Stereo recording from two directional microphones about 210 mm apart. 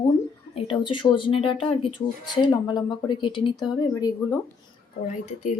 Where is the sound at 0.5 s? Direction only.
25° left (ahead or behind).